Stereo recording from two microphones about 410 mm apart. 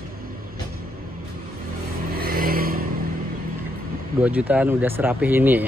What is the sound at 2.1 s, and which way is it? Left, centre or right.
Vehicle, right.